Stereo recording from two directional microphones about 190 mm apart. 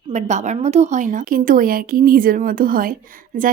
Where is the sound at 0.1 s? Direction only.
35° right (ahead or behind).